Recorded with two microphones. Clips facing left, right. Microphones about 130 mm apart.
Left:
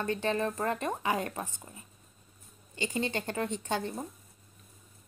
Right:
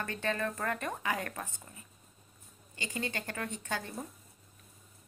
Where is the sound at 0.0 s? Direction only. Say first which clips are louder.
Left 4 dB; 20° left (ahead or behind).